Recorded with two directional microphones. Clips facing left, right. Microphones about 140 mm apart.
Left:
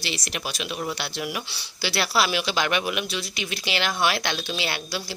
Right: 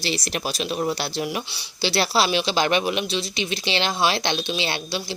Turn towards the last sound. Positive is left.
turn(degrees=-25)  # may be behind; listen again after turning